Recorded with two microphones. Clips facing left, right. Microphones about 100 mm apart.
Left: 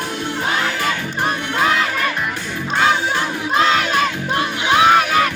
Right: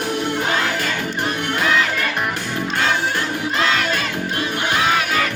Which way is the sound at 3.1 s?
50° left (ahead or behind).